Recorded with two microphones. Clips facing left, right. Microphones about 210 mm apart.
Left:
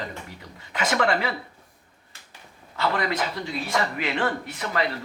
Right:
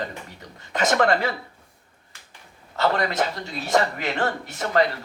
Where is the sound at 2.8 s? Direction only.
45° right (ahead or behind).